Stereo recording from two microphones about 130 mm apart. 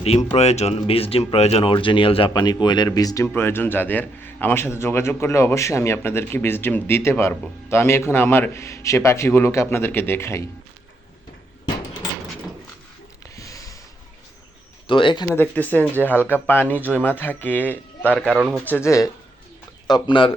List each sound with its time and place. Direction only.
0.0 s speech: 55° left (ahead or behind); by 3.2 s 30° left (ahead or behind)
3.2 s a man's voice: 15° left (ahead or behind)
13.3 s sniff: 25° left (ahead or behind)
14.8 s speech: 40° left (ahead or behind)
15.4 s a man's voice: 15° left (ahead or behind)
19.9 s speech: 40° left (ahead or behind)